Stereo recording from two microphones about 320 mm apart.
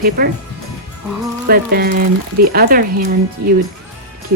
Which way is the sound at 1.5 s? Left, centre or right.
Right.